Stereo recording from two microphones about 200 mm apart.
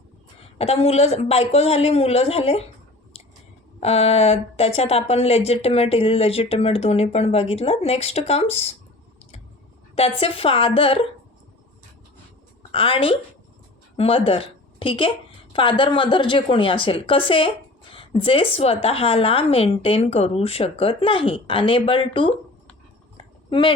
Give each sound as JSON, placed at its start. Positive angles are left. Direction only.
{"t": 0.6, "sound": "a woman's voice", "side_deg": 30}
{"t": 3.8, "sound": "a woman's voice", "side_deg": 30}
{"t": 9.9, "sound": "a woman's voice", "side_deg": 30}
{"t": 12.7, "sound": "a woman's voice", "side_deg": 25}
{"t": 23.1, "sound": "a sound", "side_deg": 25}